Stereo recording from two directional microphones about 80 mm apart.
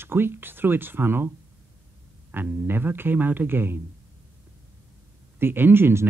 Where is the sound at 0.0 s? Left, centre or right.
Right.